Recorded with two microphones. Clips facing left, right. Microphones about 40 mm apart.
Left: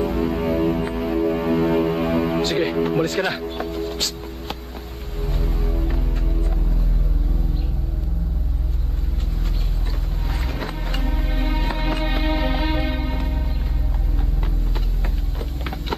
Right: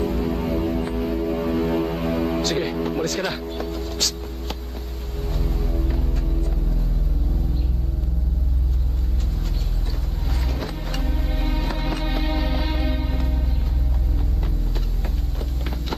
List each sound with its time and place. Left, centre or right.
0.0 s music: centre
10.6 s music: centre